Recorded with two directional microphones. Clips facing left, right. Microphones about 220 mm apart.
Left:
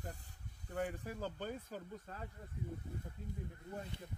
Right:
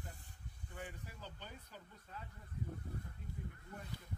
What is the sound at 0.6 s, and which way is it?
Speech, 40° left (ahead or behind).